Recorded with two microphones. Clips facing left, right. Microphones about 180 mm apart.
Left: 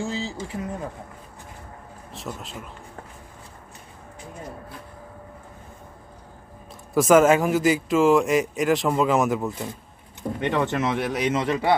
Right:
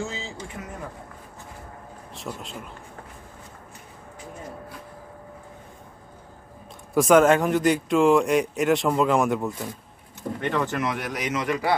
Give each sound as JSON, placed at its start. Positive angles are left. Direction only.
{"t": 0.0, "sound": "a sound", "side_deg": 35}
{"t": 2.1, "sound": "a man's voice", "side_deg": 0}
{"t": 6.9, "sound": "a man's voice", "side_deg": 0}
{"t": 10.4, "sound": "a man's voice", "side_deg": 20}